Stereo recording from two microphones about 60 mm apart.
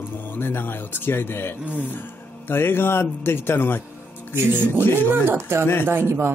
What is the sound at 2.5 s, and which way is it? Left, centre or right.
Speech, left.